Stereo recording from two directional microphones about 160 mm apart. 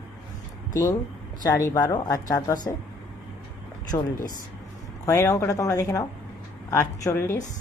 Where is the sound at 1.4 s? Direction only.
20° left (ahead or behind).